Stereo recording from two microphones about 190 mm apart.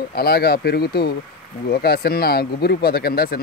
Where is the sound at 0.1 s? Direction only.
55° left (ahead or behind).